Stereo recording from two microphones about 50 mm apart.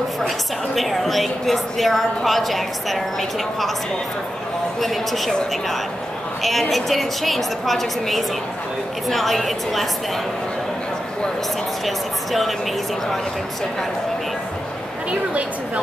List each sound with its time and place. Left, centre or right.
0.7 s a woman's voice: centre
4.7 s a woman's voice: centre
6.7 s a woman's voice: centre
11.8 s a woman's voice: centre
15.0 s speech: right